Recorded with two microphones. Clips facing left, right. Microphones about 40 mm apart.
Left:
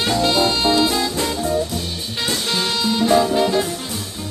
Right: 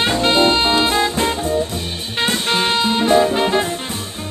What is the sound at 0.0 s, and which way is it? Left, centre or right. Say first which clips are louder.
Music: right 3 dB; right.